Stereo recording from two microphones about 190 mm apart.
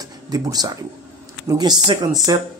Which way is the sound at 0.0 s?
20° right (ahead or behind).